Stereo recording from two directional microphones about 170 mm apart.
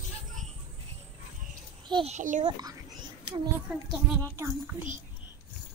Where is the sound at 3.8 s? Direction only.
20° right (ahead or behind).